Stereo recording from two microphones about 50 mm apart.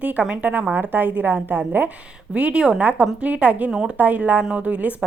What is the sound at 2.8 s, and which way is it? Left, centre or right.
Speech, right.